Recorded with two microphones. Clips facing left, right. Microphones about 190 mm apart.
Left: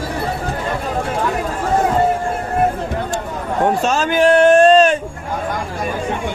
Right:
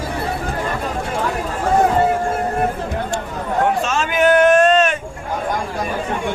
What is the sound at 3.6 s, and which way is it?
A man's voice, 35° left (ahead or behind).